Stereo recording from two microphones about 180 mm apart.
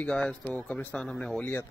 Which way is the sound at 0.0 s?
5° left (ahead or behind).